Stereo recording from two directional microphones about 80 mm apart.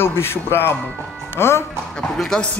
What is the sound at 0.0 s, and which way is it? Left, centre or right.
A man's voice, left.